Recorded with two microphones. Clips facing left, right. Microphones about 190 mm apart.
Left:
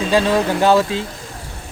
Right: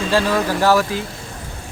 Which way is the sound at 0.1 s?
25° left (ahead or behind).